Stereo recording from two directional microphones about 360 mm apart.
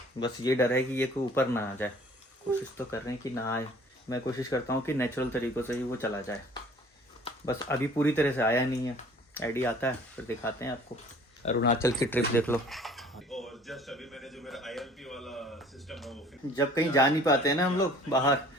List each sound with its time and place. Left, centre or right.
0.2 s speech: centre
4.1 s speech: centre
11.4 s speech: centre
11.8 s a sound: centre
16.6 s speech: centre